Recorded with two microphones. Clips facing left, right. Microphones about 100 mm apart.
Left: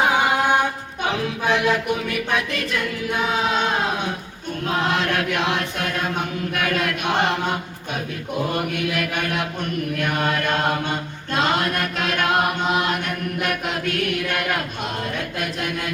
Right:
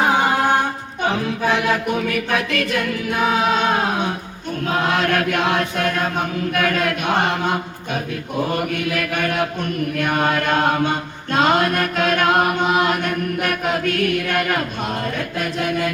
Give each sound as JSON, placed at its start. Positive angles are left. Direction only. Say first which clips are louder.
{"t": 1.1, "sound": "chant", "louder": "right 1 dB", "side_deg": -45}
{"t": 8.7, "sound": "chant", "louder": "right 2 dB", "side_deg": -45}